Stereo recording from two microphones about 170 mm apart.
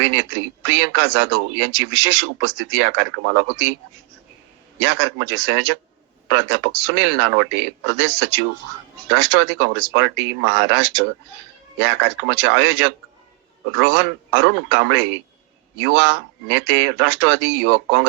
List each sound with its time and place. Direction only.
0.0 s speech: 90° right
4.8 s speech: 90° right